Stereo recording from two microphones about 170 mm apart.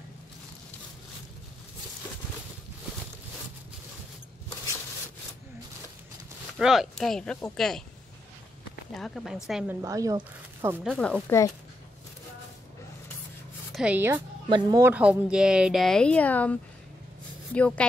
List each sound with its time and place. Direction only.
6.6 s a woman's voice: centre (ahead or behind)
8.9 s a woman's voice: centre (ahead or behind)
9.8 s speech: 20° right (ahead or behind)
10.8 s a woman's voice: centre (ahead or behind)
13.7 s speech: 5° right (ahead or behind)
14.5 s speech: 20° right (ahead or behind)
14.9 s a woman's voice: 5° right (ahead or behind); by 16.5 s 10° left (ahead or behind)
17.6 s a woman's voice: 5° left (ahead or behind)